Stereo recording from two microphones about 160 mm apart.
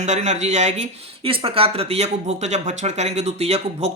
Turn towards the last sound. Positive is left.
turn(degrees=-40)  # may be behind; listen again after turning